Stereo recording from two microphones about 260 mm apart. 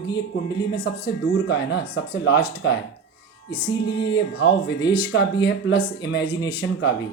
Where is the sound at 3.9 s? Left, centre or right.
Centre.